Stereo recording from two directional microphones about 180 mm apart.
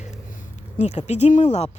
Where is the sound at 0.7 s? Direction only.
40° left (ahead or behind).